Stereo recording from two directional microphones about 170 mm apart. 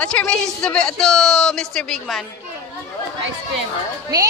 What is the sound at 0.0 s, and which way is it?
Speech, 5° left (ahead or behind).